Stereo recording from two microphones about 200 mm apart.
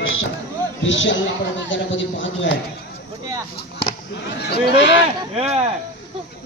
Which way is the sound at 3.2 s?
15° right (ahead or behind).